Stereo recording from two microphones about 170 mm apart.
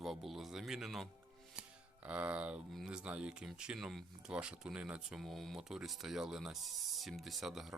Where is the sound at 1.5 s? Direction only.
5° right (ahead or behind).